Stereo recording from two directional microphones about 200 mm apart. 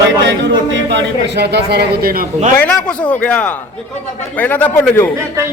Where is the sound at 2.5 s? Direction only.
5° left (ahead or behind).